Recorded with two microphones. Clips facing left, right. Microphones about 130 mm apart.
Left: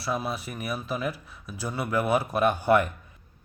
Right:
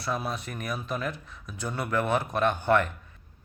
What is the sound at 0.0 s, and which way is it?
A man's voice, 5° left (ahead or behind).